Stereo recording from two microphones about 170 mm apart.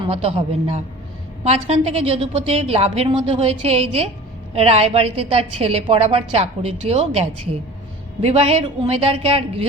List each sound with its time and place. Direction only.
0.1 s a woman's voice: 35° right (ahead or behind)